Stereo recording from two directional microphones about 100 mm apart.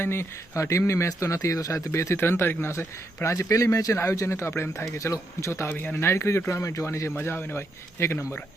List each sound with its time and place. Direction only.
0.0 s speech: 25° left (ahead or behind)